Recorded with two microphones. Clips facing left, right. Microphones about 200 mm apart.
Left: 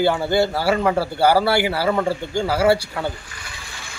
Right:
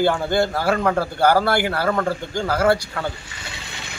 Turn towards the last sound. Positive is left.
turn(degrees=-20)  # may be behind; listen again after turning